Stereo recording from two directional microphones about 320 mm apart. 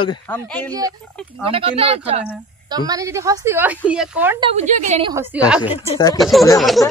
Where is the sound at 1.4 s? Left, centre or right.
Centre.